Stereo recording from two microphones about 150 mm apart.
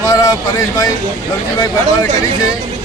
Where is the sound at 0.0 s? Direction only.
20° left (ahead or behind).